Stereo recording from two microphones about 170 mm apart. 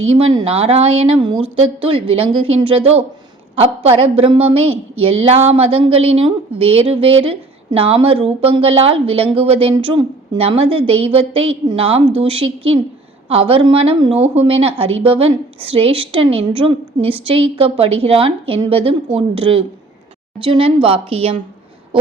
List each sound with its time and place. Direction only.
0.2 s a woman's voice: 35° right (ahead or behind)